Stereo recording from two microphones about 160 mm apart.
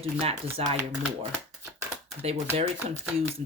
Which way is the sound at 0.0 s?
40° right (ahead or behind).